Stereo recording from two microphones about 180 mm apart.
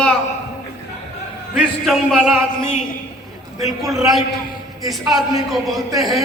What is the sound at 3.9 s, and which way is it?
A man's voice, centre (ahead or behind).